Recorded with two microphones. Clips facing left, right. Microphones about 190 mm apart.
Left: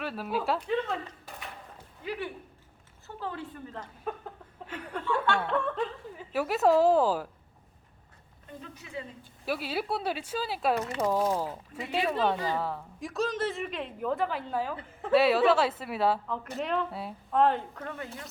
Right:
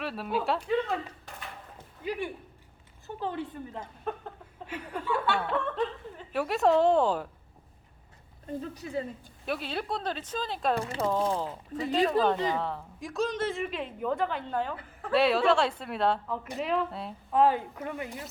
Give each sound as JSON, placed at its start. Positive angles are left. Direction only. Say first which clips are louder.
{"t": 0.0, "sound": "a woman's voice", "louder": "right 1 dB", "side_deg": 0}
{"t": 2.0, "sound": "a woman's voice", "louder": "right 2 dB", "side_deg": -15}
{"t": 4.1, "sound": "a sound", "louder": "right 1 dB", "side_deg": 5}
{"t": 4.7, "sound": "a woman's voice", "louder": "even", "side_deg": -10}
{"t": 8.4, "sound": "a woman's voice", "louder": "right 9 dB", "side_deg": -40}
{"t": 9.5, "sound": "speech", "louder": "left 1 dB", "side_deg": 5}
{"t": 10.8, "sound": "a woman's voice", "louder": "even", "side_deg": -30}
{"t": 11.0, "sound": "a woman's voice", "louder": "left 1 dB", "side_deg": 10}